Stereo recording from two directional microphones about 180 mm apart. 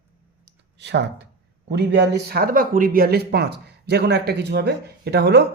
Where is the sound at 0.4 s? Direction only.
70° right (ahead or behind).